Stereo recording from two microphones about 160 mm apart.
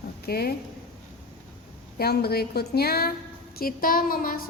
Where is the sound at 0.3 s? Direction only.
70° left (ahead or behind).